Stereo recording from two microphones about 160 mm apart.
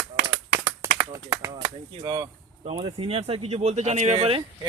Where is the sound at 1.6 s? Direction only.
25° right (ahead or behind).